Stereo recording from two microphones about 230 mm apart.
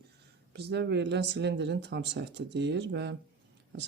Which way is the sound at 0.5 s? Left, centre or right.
Right.